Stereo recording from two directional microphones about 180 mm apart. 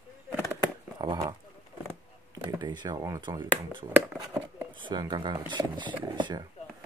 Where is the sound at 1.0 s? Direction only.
25° right (ahead or behind).